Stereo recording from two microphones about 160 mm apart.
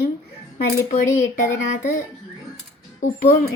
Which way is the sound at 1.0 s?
15° left (ahead or behind).